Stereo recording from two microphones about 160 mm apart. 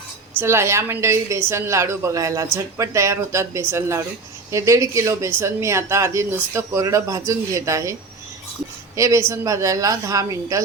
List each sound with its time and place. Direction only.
0.3 s speech: 15° right (ahead or behind)
9.0 s a woman's voice: 20° right (ahead or behind)